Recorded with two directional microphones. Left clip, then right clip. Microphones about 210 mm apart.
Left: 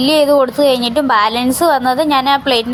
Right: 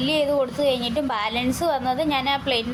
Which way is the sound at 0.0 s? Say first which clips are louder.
Left 11 dB; 25° left (ahead or behind).